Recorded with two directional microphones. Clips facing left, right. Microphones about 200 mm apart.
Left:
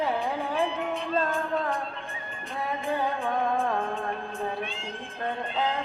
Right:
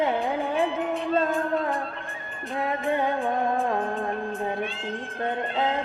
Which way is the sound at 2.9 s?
20° right (ahead or behind).